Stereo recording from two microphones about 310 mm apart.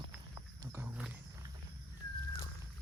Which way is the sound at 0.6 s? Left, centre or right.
Centre.